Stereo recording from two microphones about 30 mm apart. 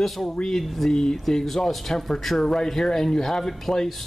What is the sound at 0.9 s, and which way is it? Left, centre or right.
Speech, left.